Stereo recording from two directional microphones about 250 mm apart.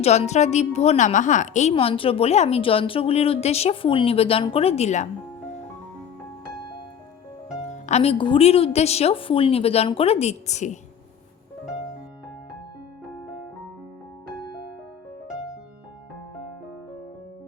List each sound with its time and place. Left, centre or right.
0.0 s a woman's voice: left
7.5 s a woman's voice: left